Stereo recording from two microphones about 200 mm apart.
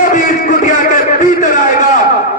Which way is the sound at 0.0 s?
40° left (ahead or behind).